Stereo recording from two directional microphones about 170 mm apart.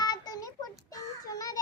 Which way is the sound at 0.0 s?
25° left (ahead or behind).